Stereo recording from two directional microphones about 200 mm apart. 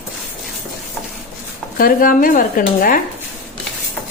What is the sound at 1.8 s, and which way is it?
Speech, 45° left (ahead or behind).